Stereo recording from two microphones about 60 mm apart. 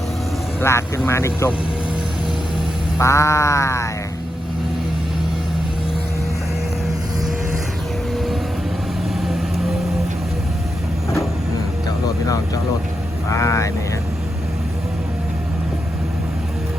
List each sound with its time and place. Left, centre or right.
0.6 s speech: left
3.0 s sheep: left
8.1 s vehicle: centre
13.3 s sheep: left